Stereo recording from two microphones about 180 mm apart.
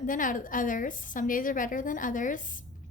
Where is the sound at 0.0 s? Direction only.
45° left (ahead or behind).